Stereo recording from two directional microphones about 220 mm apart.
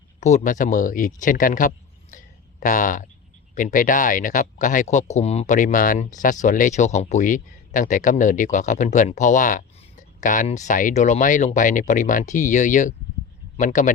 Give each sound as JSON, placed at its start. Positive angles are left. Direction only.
{"t": 0.2, "sound": "speech", "side_deg": 30}